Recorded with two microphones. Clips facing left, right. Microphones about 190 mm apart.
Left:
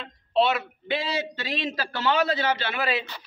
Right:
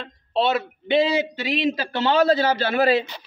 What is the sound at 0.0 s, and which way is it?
A man's voice, 35° right (ahead or behind).